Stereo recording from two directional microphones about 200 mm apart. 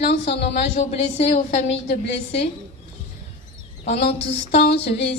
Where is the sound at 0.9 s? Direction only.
35° left (ahead or behind).